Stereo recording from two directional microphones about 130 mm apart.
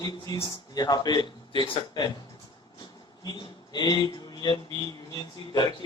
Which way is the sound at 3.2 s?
30° left (ahead or behind).